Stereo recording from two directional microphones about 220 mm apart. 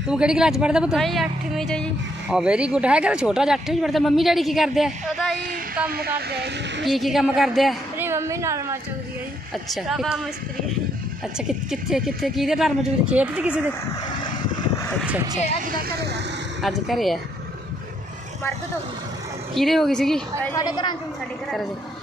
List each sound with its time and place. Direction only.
0.1 s speech: 5° right (ahead or behind)
5.9 s speech: 45° right (ahead or behind)
6.8 s speech: centre (ahead or behind)
8.1 s a woman's voice: 10° right (ahead or behind)
9.5 s speech: centre (ahead or behind)
11.3 s speech: centre (ahead or behind)
14.8 s vehicle: 5° left (ahead or behind)
15.6 s speech: 40° right (ahead or behind)
16.6 s speech: centre (ahead or behind)
19.5 s speech: centre (ahead or behind)
20.6 s a woman's voice: 20° left (ahead or behind)